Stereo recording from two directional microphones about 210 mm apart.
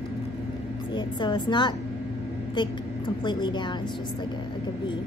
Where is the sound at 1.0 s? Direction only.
20° left (ahead or behind).